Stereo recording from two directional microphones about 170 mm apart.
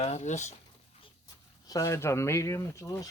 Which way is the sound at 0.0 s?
40° left (ahead or behind).